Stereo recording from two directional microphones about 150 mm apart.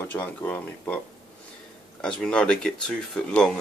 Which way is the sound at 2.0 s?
5° left (ahead or behind).